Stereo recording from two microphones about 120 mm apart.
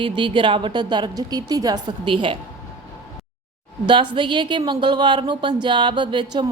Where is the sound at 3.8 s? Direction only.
40° right (ahead or behind).